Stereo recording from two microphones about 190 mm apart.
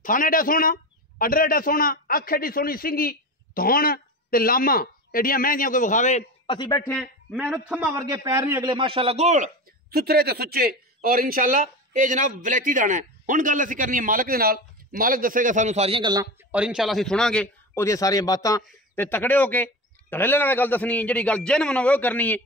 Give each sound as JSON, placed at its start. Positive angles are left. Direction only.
{"t": 0.0, "sound": "a man's voice", "side_deg": 45}
{"t": 6.5, "sound": "a man's voice", "side_deg": 20}
{"t": 7.4, "sound": "a man's voice", "side_deg": -5}
{"t": 7.9, "sound": "a man's voice", "side_deg": -20}
{"t": 8.7, "sound": "a man's voice", "side_deg": -30}
{"t": 9.8, "sound": "a man's voice", "side_deg": -55}
{"t": 16.5, "sound": "a man's voice", "side_deg": -5}
{"t": 17.8, "sound": "a man's voice", "side_deg": 15}